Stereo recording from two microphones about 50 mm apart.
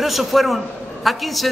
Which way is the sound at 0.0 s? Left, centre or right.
Centre.